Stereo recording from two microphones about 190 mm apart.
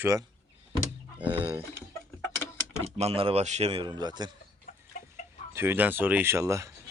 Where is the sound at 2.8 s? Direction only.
30° right (ahead or behind).